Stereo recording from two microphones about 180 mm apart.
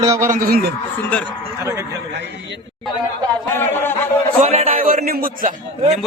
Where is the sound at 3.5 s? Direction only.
10° left (ahead or behind).